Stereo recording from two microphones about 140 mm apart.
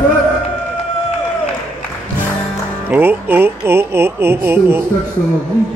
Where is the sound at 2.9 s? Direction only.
15° right (ahead or behind).